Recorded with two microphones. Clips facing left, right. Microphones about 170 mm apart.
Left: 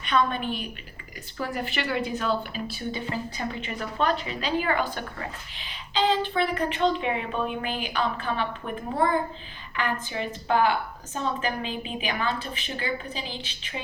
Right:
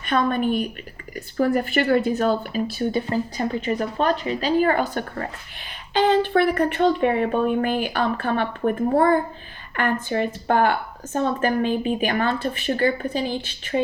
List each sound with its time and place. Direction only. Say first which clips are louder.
0.0 s speech: right 4 dB; 50° right (ahead or behind)